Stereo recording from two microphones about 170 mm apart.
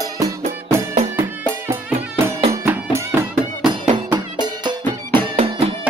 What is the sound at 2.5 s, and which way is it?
Music, 15° right (ahead or behind).